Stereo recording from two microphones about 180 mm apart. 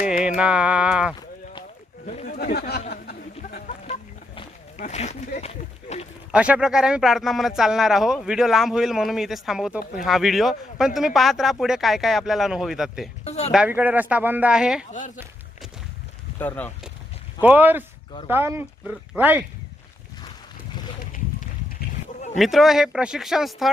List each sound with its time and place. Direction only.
0.0 s a sound: 5° right (ahead or behind)
2.0 s speech: 45° left (ahead or behind); by 2.8 s 60° left (ahead or behind)
2.9 s a sound: 60° left (ahead or behind)
4.4 s a sound: 35° left (ahead or behind)
6.3 s speech: 5° right (ahead or behind)
13.2 s speech: 35° left (ahead or behind)
13.5 s speech: 5° right (ahead or behind)
14.8 s speech: 45° left (ahead or behind)
16.4 s speech: 10° left (ahead or behind)
17.4 s speech: 10° right (ahead or behind)
22.4 s speech: centre (ahead or behind)